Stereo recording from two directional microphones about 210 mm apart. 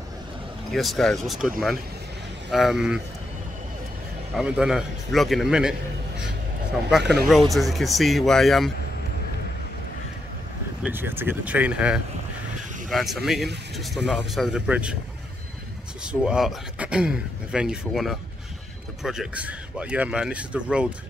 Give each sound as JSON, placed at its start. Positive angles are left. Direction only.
{"t": 0.7, "sound": "speech", "side_deg": 0}
{"t": 2.5, "sound": "speech", "side_deg": 0}
{"t": 4.4, "sound": "speech", "side_deg": -5}
{"t": 6.9, "sound": "speech", "side_deg": 0}
{"t": 10.8, "sound": "speech", "side_deg": -10}
{"t": 16.1, "sound": "speech", "side_deg": -5}